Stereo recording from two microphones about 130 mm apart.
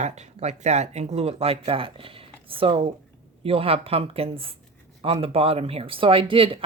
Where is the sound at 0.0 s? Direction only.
60° right (ahead or behind).